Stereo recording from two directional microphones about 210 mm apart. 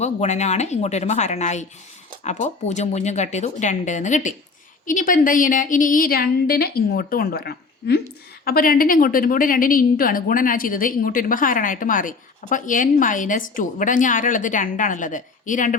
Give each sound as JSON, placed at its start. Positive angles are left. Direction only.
{"t": 0.0, "sound": "a woman's voice", "side_deg": 30}